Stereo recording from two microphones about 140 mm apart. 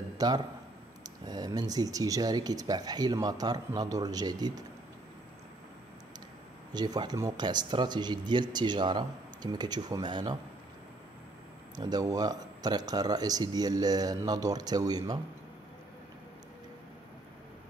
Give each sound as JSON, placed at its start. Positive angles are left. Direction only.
{"t": 0.2, "sound": "speech", "side_deg": -30}
{"t": 6.7, "sound": "speech", "side_deg": -30}
{"t": 11.7, "sound": "speech", "side_deg": -30}